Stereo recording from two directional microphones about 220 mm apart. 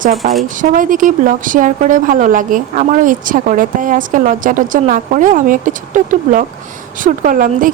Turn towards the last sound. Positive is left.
turn(degrees=-40)  # may be behind; listen again after turning